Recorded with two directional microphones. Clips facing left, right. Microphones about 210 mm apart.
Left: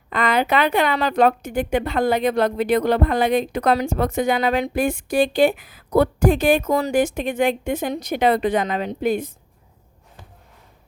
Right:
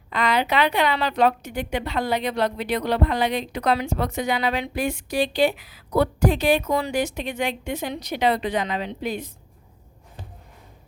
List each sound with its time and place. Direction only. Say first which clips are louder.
0.1 s a woman's voice: left 3 dB; 50° left (ahead or behind)